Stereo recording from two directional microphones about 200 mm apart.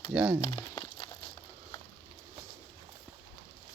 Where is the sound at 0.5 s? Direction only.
20° left (ahead or behind).